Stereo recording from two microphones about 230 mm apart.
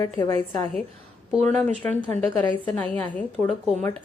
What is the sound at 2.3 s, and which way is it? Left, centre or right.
Speech, centre.